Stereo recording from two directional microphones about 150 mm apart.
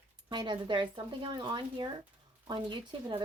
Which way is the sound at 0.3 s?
30° right (ahead or behind).